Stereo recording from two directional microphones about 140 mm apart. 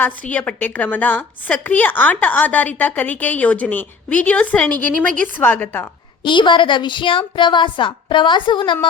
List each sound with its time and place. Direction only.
0.0 s a woman's voice: 10° left (ahead or behind)
6.2 s a woman's voice: 35° left (ahead or behind)